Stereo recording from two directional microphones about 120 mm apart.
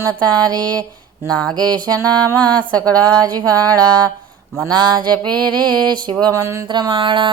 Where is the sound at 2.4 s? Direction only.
10° left (ahead or behind).